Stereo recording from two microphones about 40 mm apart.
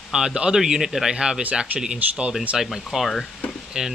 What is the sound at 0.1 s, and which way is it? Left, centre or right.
A man's voice, centre.